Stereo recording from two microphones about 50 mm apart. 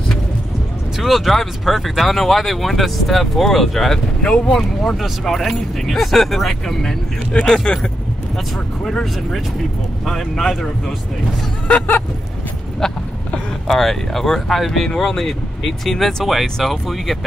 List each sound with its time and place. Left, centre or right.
0.9 s speech: centre
4.2 s speech: centre
4.6 s speech: centre
10.0 s speech: centre
11.6 s vehicle: left
12.8 s speech: centre